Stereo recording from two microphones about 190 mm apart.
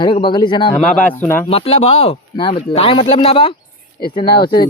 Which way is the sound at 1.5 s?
30° left (ahead or behind).